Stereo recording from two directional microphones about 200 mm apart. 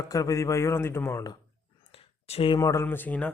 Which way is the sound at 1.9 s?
30° left (ahead or behind).